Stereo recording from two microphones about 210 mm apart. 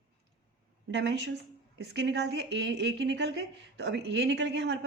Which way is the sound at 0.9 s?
55° right (ahead or behind).